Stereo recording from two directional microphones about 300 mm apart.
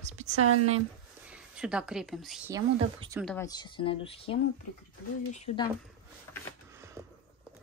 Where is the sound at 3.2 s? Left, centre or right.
Centre.